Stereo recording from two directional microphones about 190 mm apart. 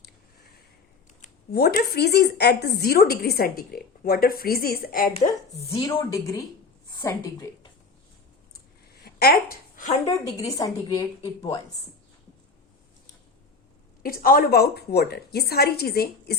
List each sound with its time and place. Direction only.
1.5 s a woman's voice: 55° left (ahead or behind)
5.1 s a woman's voice: 35° left (ahead or behind)
5.7 s a woman's voice: 15° left (ahead or behind)
9.0 s a sound: 55° left (ahead or behind)
10.1 s a woman's voice: 15° left (ahead or behind)
14.0 s a woman's voice: 50° left (ahead or behind)